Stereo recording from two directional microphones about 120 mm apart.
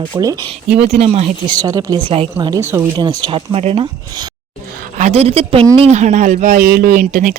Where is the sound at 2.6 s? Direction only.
20° right (ahead or behind).